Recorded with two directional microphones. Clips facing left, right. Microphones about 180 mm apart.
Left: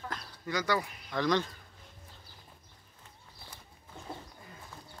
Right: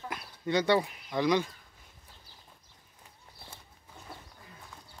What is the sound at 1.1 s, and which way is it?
Speech, 10° right (ahead or behind).